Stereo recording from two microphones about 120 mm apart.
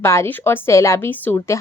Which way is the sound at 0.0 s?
20° left (ahead or behind).